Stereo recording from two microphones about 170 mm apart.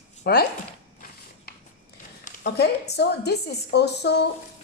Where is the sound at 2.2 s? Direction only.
65° left (ahead or behind).